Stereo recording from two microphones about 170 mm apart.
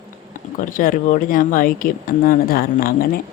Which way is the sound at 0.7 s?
55° left (ahead or behind).